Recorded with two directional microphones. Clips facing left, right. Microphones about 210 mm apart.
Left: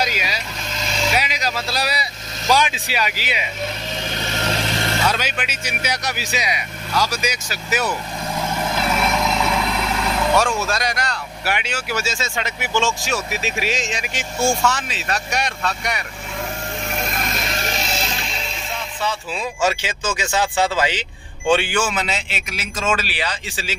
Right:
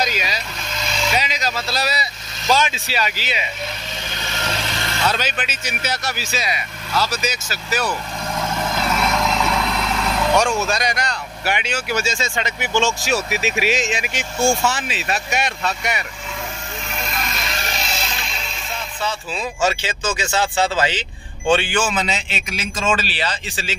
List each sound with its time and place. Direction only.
0.0 s speech: 10° left (ahead or behind)
5.0 s speech: 10° left (ahead or behind)
16.9 s music: 45° left (ahead or behind)
19.6 s speech: 10° left (ahead or behind)